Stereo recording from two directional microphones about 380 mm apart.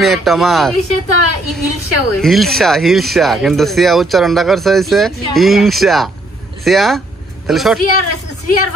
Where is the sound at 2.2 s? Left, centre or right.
Centre.